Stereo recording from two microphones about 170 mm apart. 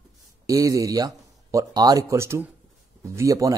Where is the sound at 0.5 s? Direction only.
20° right (ahead or behind).